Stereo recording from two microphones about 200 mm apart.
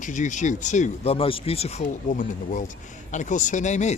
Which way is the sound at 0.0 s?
40° left (ahead or behind).